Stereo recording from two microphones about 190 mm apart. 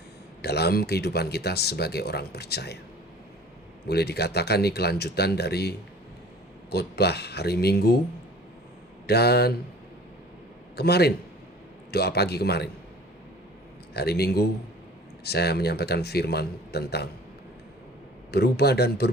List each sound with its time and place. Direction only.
0.4 s speech: 60° left (ahead or behind)
3.8 s speech: 60° left (ahead or behind)
9.0 s speech: 60° left (ahead or behind)
10.8 s speech: 60° left (ahead or behind)
13.9 s speech: 60° left (ahead or behind)
18.3 s speech: 60° left (ahead or behind)